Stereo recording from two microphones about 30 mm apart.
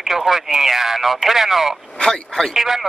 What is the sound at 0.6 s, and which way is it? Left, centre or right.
Speech, centre.